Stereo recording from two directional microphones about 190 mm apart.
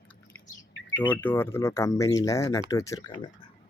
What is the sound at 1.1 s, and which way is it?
Speech, 10° left (ahead or behind).